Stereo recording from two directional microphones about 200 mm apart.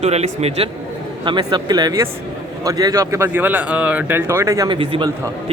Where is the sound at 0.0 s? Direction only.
30° right (ahead or behind).